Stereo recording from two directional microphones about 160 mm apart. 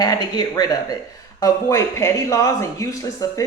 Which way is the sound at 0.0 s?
25° left (ahead or behind).